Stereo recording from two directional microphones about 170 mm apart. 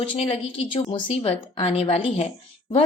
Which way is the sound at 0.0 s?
30° left (ahead or behind).